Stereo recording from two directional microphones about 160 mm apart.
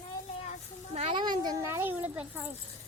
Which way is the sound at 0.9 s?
40° right (ahead or behind).